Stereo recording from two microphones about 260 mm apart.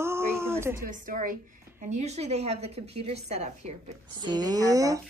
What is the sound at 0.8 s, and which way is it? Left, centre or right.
A woman's voice, right.